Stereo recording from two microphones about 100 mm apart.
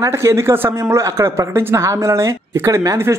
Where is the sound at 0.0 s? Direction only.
30° right (ahead or behind).